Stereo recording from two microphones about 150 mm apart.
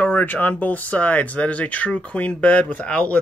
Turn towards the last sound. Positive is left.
turn(degrees=10)  # may be behind; listen again after turning